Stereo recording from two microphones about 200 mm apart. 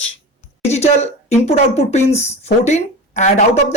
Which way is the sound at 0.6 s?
35° left (ahead or behind).